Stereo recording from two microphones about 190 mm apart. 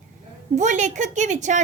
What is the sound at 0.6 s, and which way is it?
A woman's voice, 40° right (ahead or behind).